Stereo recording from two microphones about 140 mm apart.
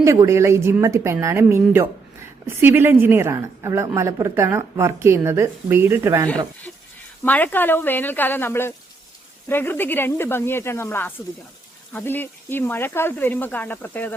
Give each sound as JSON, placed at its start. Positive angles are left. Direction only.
{"t": 0.0, "sound": "a woman's voice", "side_deg": -20}
{"t": 7.3, "sound": "speech", "side_deg": 10}